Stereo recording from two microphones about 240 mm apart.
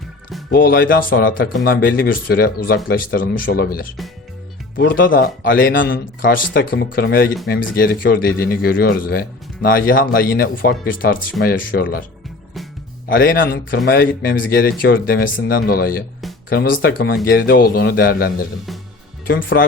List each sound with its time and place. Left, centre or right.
0.5 s speech: left
13.3 s speech: left